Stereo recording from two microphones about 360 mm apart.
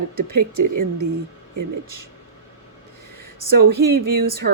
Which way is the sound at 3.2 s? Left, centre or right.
Right.